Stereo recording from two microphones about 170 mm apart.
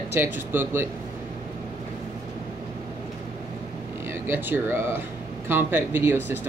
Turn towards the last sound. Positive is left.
turn(degrees=-10)  # may be behind; listen again after turning